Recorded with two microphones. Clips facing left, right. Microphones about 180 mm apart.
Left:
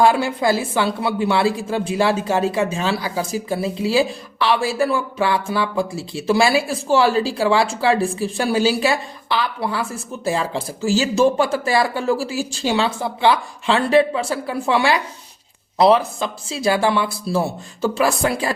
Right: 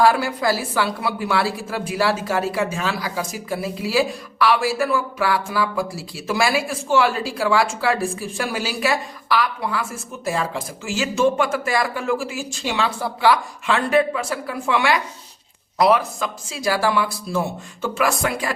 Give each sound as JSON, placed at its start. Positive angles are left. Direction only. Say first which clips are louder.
{"t": 0.0, "sound": "a woman's voice", "louder": "left 2 dB", "side_deg": 25}